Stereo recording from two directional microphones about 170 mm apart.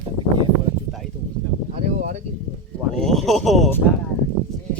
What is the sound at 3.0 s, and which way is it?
Speech, centre (ahead or behind).